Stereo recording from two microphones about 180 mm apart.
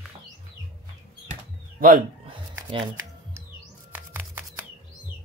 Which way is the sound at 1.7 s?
50° right (ahead or behind).